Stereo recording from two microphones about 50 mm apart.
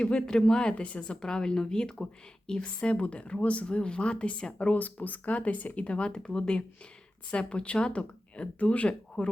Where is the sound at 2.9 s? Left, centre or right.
Left.